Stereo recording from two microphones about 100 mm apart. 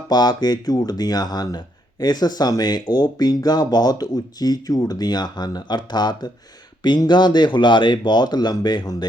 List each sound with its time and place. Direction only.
0.1 s speech: 45° left (ahead or behind)